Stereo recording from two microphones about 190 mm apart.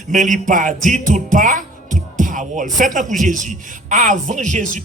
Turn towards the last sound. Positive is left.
turn(degrees=-40)  # may be behind; listen again after turning